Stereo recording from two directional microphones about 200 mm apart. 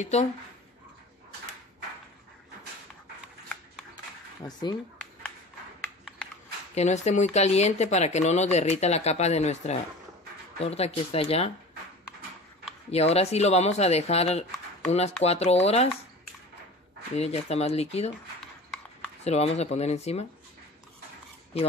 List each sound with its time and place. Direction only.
0.0 s speech: 35° left (ahead or behind)
4.5 s speech: 20° left (ahead or behind)
6.7 s speech: 35° left (ahead or behind)
12.9 s speech: 30° left (ahead or behind)
17.1 s speech: 30° left (ahead or behind)
19.2 s speech: 30° left (ahead or behind)